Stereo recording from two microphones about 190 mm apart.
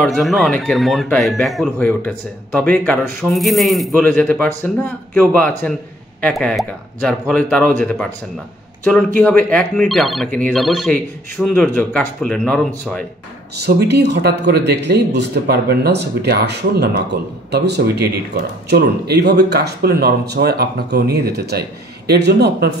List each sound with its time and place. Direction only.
0.0 s speech: centre (ahead or behind)
9.2 s speech: 5° left (ahead or behind)
13.6 s speech: 60° right (ahead or behind)